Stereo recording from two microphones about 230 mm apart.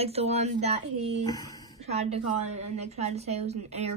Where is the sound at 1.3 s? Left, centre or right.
Centre.